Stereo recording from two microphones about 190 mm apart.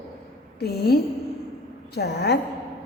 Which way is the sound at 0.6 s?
55° left (ahead or behind).